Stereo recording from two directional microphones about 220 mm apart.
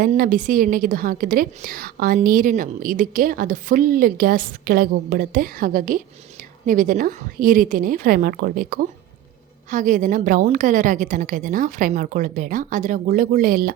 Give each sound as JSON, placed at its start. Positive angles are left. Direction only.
{"t": 0.0, "sound": "a woman's voice", "side_deg": -40}